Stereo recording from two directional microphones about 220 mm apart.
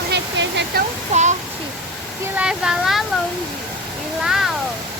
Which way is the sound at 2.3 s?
5° right (ahead or behind).